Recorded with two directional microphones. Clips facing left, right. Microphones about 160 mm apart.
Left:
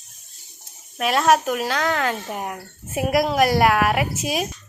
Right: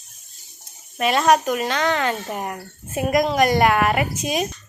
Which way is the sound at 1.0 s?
Centre (ahead or behind).